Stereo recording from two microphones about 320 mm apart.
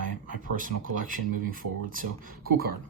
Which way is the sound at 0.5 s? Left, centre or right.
Right.